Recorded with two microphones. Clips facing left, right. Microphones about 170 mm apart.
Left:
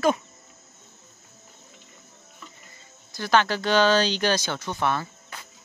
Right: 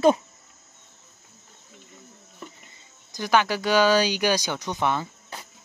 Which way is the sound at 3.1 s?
15° right (ahead or behind).